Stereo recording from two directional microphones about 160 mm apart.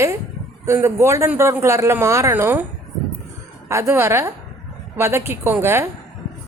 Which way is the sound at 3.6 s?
15° right (ahead or behind).